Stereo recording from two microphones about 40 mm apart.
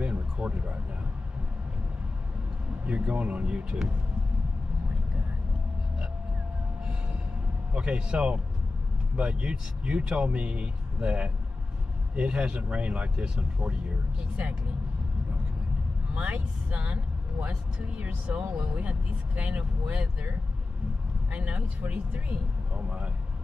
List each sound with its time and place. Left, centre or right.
0.0 s a sound: right
2.8 s a man's voice: right
7.7 s a man's voice: right
16.2 s speech: right
17.7 s speech: right
19.9 s a man's voice: right
21.3 s speech: right